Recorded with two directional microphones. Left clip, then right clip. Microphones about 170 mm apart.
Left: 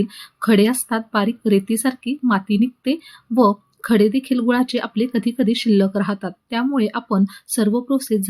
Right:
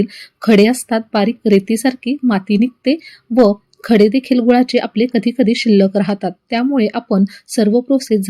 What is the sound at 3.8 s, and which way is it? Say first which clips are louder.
Speech: right 5 dB; 15° right (ahead or behind).